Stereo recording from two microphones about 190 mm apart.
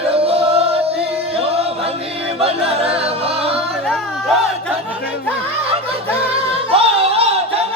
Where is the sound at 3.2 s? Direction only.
30° right (ahead or behind).